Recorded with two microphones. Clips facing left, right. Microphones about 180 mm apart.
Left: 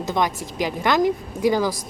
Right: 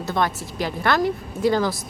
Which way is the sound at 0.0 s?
15° left (ahead or behind).